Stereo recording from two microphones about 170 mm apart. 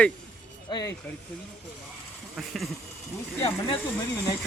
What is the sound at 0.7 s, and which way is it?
Speech, 25° left (ahead or behind).